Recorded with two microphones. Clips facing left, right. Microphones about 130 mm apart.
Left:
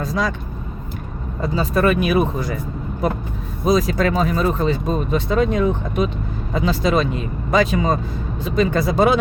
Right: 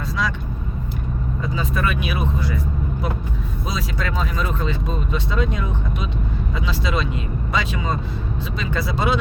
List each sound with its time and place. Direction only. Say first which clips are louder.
0.0 s vehicle: left 3 dB; 40° left (ahead or behind)
1.4 s speech: left 7 dB; 40° left (ahead or behind)
3.7 s speech: left 11 dB; 45° left (ahead or behind)